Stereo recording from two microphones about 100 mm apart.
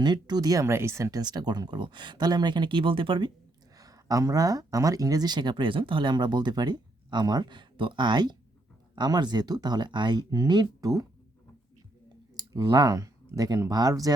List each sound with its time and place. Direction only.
0.0 s speech: 45° right (ahead or behind); by 1.2 s 30° right (ahead or behind)
1.2 s speech: 45° right (ahead or behind)
3.8 s speech: 35° right (ahead or behind)
12.3 s speech: 35° right (ahead or behind)